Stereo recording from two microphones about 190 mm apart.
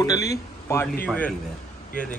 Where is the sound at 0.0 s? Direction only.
20° left (ahead or behind).